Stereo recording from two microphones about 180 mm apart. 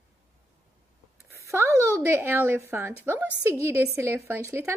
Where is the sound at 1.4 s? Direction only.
15° right (ahead or behind).